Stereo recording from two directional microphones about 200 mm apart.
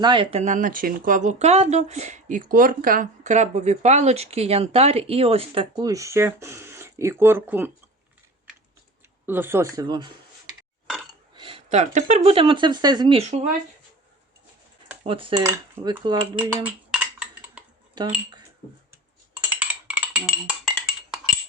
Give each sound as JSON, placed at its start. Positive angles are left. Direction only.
{"t": 0.0, "sound": "speech", "side_deg": -25}
{"t": 9.2, "sound": "speech", "side_deg": -10}
{"t": 11.3, "sound": "speech", "side_deg": -25}
{"t": 15.0, "sound": "speech", "side_deg": -25}
{"t": 16.5, "sound": "cutlery", "side_deg": -10}
{"t": 18.0, "sound": "speech", "side_deg": -20}
{"t": 19.5, "sound": "a sound", "side_deg": -5}